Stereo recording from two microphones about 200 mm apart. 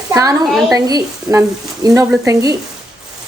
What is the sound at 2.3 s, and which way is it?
Speech, 15° right (ahead or behind).